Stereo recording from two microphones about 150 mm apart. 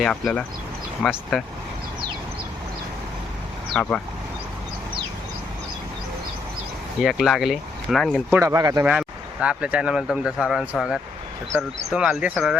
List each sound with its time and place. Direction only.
0.0 s speech: 5° left (ahead or behind)
3.8 s speech: 10° left (ahead or behind)
7.0 s speech: centre (ahead or behind)
8.3 s speech: 20° right (ahead or behind)
8.8 s speech: 10° right (ahead or behind)